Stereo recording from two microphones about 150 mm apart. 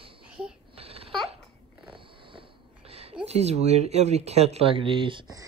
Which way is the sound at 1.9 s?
35° right (ahead or behind).